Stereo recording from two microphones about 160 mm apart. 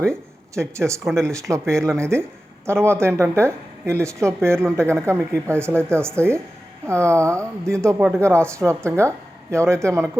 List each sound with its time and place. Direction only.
0.1 s speech: 15° right (ahead or behind)
1.0 s speech: 5° left (ahead or behind)
1.3 s speech: 20° right (ahead or behind)